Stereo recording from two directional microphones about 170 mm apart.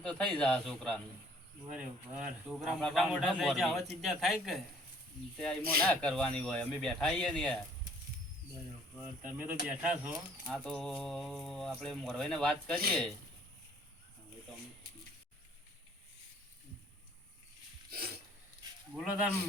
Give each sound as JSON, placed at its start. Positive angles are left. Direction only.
{"t": 0.0, "sound": "speech", "side_deg": 5}
{"t": 1.7, "sound": "speech", "side_deg": -5}
{"t": 9.0, "sound": "speech", "side_deg": -10}
{"t": 10.4, "sound": "speech", "side_deg": 5}
{"t": 17.9, "sound": "a sound", "side_deg": -65}
{"t": 18.9, "sound": "speech", "side_deg": -5}